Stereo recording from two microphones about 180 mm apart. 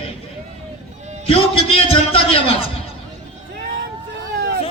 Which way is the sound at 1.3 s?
30° left (ahead or behind).